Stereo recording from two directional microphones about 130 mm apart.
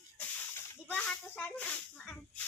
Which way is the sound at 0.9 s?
10° left (ahead or behind).